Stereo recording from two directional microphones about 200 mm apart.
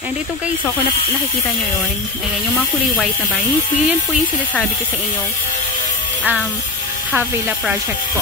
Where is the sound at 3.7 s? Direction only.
35° left (ahead or behind).